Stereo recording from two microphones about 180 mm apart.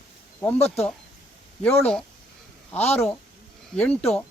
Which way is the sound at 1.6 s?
5° left (ahead or behind).